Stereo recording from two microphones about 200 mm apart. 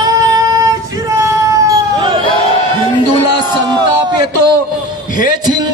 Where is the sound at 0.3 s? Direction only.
15° right (ahead or behind).